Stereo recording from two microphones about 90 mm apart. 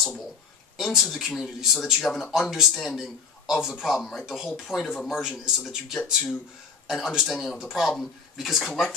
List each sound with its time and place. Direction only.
0.7 s a man's voice: centre (ahead or behind)